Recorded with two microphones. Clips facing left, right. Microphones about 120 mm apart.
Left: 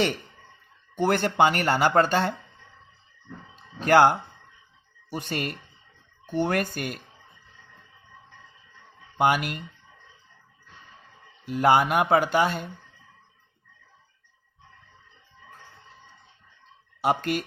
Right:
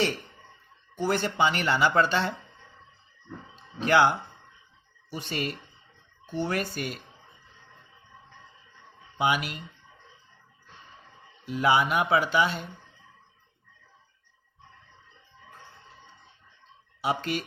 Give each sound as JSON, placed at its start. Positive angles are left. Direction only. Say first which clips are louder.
{"t": 0.9, "sound": "speech", "louder": "left 4 dB", "side_deg": 55}
{"t": 3.8, "sound": "speech", "louder": "left 4 dB", "side_deg": 50}
{"t": 9.1, "sound": "speech", "louder": "left 4 dB", "side_deg": 50}
{"t": 11.4, "sound": "speech", "louder": "left 3 dB", "side_deg": 50}
{"t": 17.0, "sound": "speech", "louder": "left 4 dB", "side_deg": 50}